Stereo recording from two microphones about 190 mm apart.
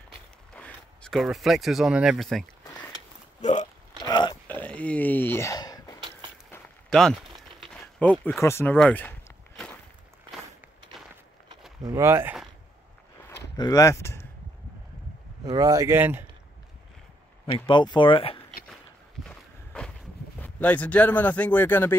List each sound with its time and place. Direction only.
0.6 s speech: centre (ahead or behind)
3.3 s hiccup: 40° left (ahead or behind)
4.0 s a sound: 25° left (ahead or behind)
4.5 s a sound: 10° left (ahead or behind)
6.5 s a sound: 5° left (ahead or behind)
7.7 s speech: 10° left (ahead or behind)
11.8 s speech: 20° right (ahead or behind)
13.3 s a sound: 20° left (ahead or behind)
15.4 s speech: 20° right (ahead or behind)
17.6 s speech: 25° left (ahead or behind)
19.2 s walk: 5° left (ahead or behind)
20.3 s speech: 10° left (ahead or behind)